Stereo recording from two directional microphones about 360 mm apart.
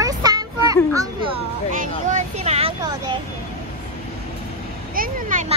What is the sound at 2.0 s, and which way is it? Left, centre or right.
Speech, centre.